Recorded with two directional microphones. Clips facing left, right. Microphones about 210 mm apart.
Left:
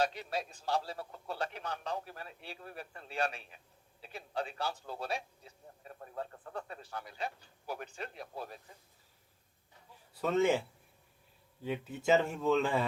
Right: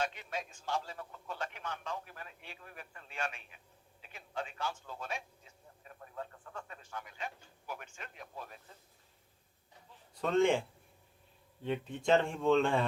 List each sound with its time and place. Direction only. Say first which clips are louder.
0.0 s a man's voice: left 4 dB; 35° left (ahead or behind)
10.2 s speech: even; 5° left (ahead or behind)
11.6 s speech: even; 5° left (ahead or behind)